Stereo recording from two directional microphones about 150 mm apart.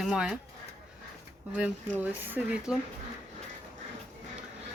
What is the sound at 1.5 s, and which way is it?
Speech, 10° right (ahead or behind).